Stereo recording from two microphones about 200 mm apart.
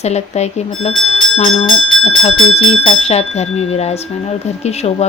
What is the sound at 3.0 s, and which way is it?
Speech, 30° left (ahead or behind).